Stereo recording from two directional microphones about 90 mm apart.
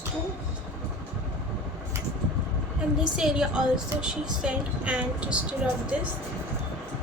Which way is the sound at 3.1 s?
5° right (ahead or behind).